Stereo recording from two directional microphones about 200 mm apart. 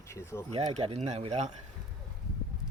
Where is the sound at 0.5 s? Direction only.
30° right (ahead or behind).